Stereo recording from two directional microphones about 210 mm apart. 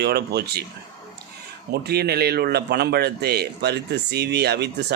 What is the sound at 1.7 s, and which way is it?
A man's voice, 50° right (ahead or behind).